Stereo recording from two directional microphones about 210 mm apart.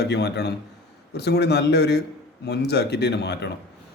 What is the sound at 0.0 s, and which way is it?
Speech, 55° left (ahead or behind).